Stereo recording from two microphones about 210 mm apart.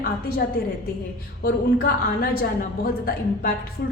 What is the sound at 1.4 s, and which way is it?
A woman's voice, 45° left (ahead or behind).